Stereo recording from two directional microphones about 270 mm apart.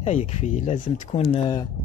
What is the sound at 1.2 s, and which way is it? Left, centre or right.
Speech, centre.